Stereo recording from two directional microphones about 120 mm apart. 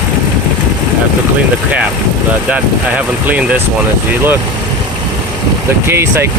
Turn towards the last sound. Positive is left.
turn(degrees=-20)  # may be behind; listen again after turning